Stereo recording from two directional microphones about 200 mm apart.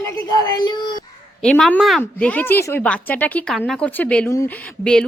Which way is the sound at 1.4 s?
5° left (ahead or behind).